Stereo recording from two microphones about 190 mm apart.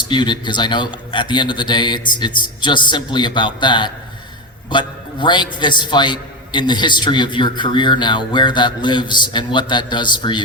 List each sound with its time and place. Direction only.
0.1 s a man's voice: 25° left (ahead or behind)